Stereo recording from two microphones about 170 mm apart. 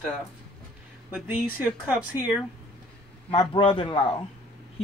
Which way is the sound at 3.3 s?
30° left (ahead or behind).